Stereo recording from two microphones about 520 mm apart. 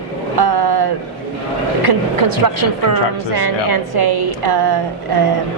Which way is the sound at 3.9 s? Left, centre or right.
Right.